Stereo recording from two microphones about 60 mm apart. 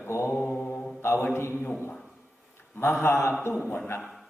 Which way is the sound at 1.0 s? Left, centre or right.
Left.